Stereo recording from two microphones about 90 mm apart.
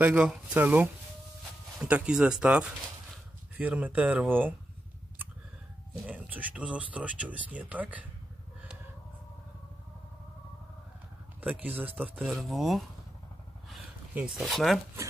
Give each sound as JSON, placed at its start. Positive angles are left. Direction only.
{"t": 0.0, "sound": "speech", "side_deg": -10}
{"t": 6.0, "sound": "speech", "side_deg": -15}
{"t": 11.6, "sound": "speech", "side_deg": -20}
{"t": 12.2, "sound": "speech", "side_deg": 0}
{"t": 14.1, "sound": "speech", "side_deg": -15}
{"t": 14.4, "sound": "speech", "side_deg": 0}